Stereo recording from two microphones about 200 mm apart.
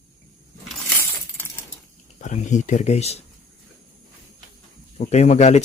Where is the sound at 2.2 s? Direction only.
35° left (ahead or behind).